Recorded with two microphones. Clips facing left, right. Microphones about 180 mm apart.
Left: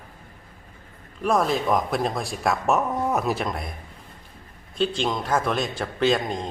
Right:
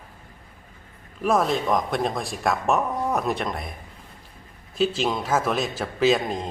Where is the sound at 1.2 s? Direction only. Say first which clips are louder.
Even; centre (ahead or behind).